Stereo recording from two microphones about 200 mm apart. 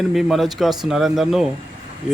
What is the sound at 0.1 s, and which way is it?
Speech, centre (ahead or behind).